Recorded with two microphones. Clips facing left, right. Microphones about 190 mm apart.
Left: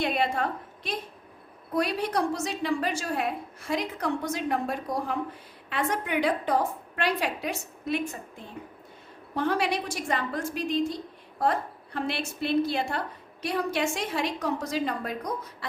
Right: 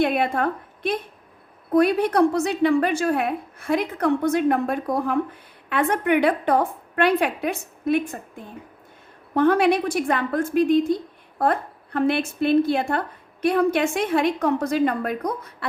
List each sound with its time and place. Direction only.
0.0 s a woman's voice: 55° right (ahead or behind)